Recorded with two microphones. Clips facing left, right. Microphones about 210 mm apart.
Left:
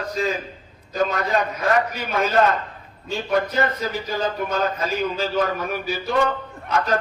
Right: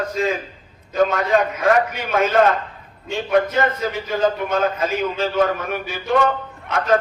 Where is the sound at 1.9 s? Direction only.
35° left (ahead or behind).